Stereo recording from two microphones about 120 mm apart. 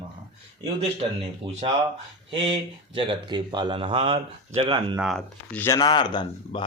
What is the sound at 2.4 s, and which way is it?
Speech, 50° right (ahead or behind).